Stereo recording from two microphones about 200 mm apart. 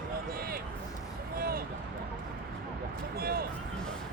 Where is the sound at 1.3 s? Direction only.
45° right (ahead or behind).